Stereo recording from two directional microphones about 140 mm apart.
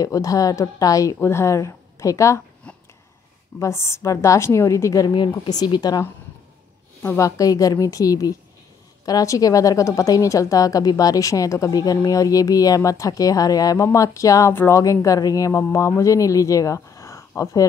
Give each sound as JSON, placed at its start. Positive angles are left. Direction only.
{"t": 0.0, "sound": "a woman's voice", "side_deg": 25}
{"t": 3.5, "sound": "a woman's voice", "side_deg": 20}